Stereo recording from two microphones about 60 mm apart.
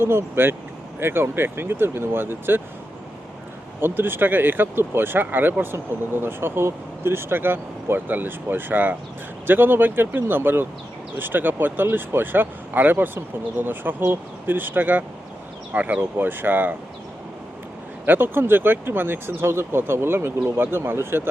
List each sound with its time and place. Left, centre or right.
0.0 s speech: right
3.8 s speech: right
18.0 s speech: right